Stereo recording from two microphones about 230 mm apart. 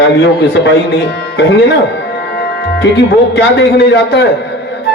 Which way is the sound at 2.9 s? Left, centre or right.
Left.